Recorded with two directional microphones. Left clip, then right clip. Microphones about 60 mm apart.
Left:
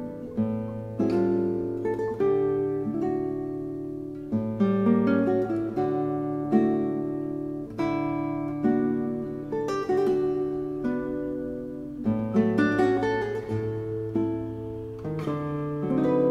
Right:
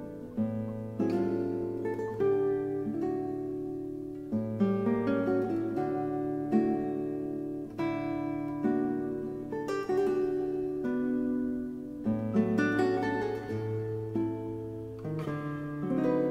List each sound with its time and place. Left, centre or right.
0.4 s music: centre
4.3 s guitar: centre
7.8 s music: centre
8.1 s music: left
8.7 s music: centre
15.8 s music: centre